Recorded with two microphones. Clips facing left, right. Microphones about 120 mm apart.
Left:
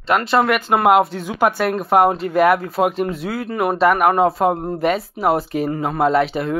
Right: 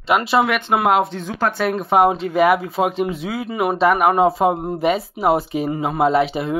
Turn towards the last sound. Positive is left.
turn(degrees=-5)  # may be behind; listen again after turning